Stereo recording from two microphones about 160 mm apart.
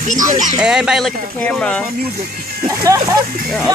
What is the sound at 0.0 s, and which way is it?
Speech, 55° right (ahead or behind).